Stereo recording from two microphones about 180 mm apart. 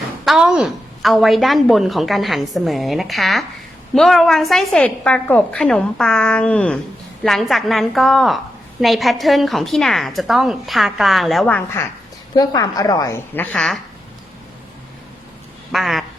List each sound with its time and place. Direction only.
0.3 s a woman's voice: 5° right (ahead or behind); by 11.9 s 10° left (ahead or behind)
12.3 s a woman's voice: 20° left (ahead or behind); by 13.7 s 5° left (ahead or behind)
15.7 s speech: centre (ahead or behind)